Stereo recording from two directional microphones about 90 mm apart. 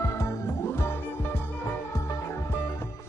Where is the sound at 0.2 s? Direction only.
35° left (ahead or behind).